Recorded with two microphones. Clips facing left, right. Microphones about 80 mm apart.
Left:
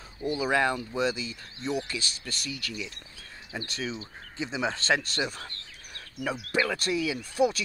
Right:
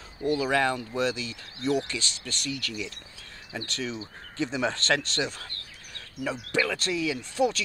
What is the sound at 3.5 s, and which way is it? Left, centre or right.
Speech, centre.